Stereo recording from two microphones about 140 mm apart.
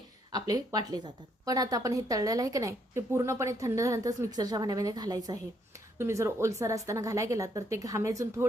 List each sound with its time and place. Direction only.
0.3 s speech: 25° right (ahead or behind)